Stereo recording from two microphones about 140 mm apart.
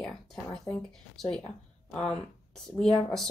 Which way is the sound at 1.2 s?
Centre (ahead or behind).